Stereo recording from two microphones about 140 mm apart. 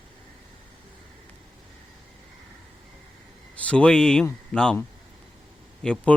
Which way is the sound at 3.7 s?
5° left (ahead or behind).